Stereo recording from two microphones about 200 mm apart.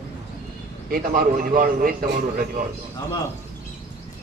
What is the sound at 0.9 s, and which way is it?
A man's voice, 45° right (ahead or behind).